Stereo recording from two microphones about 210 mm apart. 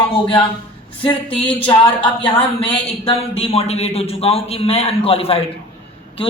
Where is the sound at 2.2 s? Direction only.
25° left (ahead or behind).